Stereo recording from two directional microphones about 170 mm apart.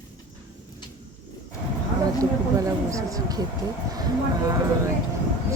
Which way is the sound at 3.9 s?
20° right (ahead or behind).